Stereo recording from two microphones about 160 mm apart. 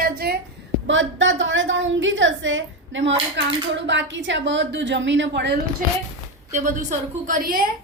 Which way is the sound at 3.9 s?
90° right.